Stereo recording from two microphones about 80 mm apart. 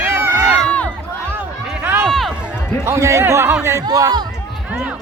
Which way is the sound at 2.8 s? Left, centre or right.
Right.